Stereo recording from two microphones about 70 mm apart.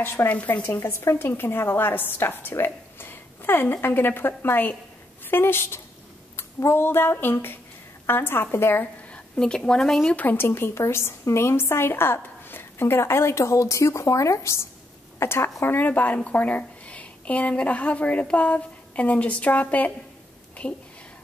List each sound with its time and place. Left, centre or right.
0.0 s a woman's voice: left
0.7 s a woman's voice: left
9.1 s a woman's voice: centre
10.0 s a woman's voice: left